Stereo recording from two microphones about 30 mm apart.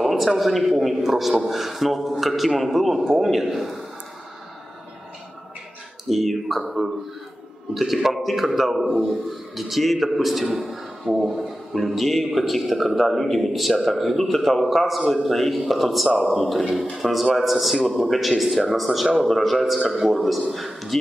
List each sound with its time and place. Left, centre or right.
0.0 s a man's voice: centre
3.0 s a man's voice: centre
6.0 s a man's voice: centre
13.1 s a man's voice: centre
19.8 s a man's voice: centre
20.1 s a man's voice: centre